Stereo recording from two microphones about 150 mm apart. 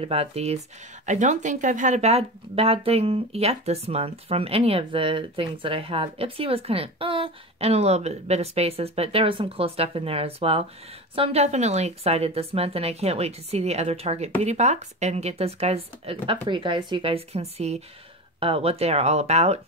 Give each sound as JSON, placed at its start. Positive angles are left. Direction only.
{"t": 0.0, "sound": "speech", "side_deg": -40}
{"t": 1.0, "sound": "speech", "side_deg": -55}